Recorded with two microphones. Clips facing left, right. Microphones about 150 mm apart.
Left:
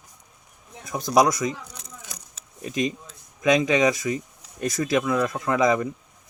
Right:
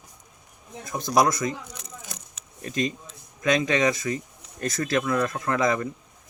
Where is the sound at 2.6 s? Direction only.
15° left (ahead or behind).